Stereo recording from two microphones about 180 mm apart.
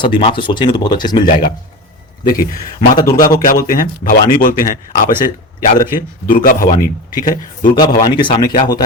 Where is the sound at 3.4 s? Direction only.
50° left (ahead or behind).